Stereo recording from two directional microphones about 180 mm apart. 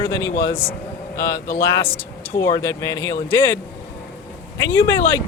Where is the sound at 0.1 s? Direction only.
15° left (ahead or behind).